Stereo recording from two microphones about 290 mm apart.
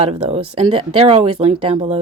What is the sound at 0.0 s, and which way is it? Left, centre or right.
Speech, right.